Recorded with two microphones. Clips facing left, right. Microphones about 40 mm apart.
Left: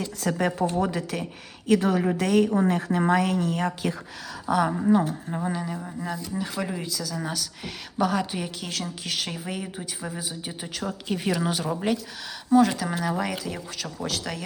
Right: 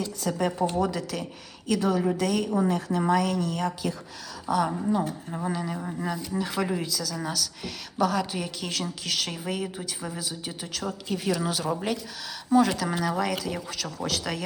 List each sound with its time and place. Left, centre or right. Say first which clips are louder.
0.2 s speech: left 2 dB; left
5.3 s a woman's voice: left 1 dB; centre
5.6 s a woman's voice: right 1 dB; centre
8.6 s a woman's voice: right 1 dB; centre
10.2 s speech: left 1 dB; centre
12.5 s speech: left 2 dB; centre